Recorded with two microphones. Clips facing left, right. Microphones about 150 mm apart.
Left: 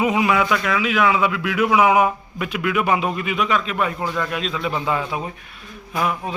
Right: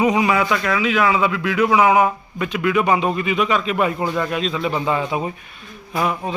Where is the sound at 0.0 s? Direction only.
5° left (ahead or behind).